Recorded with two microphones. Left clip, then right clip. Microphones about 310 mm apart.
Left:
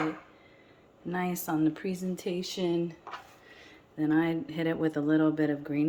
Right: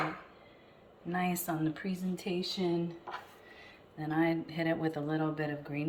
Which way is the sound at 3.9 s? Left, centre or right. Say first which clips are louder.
Left 4 dB; left.